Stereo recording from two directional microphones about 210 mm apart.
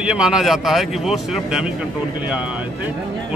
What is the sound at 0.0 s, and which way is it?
A man's voice, 5° right (ahead or behind).